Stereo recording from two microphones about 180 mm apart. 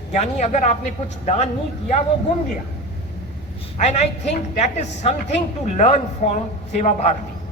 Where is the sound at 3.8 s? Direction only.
40° left (ahead or behind).